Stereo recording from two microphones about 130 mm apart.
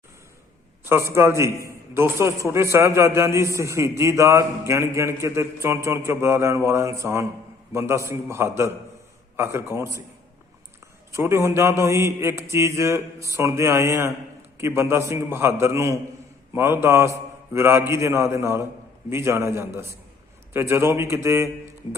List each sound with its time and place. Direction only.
0.9 s a man's voice: 20° right (ahead or behind)
11.1 s a man's voice: 20° right (ahead or behind)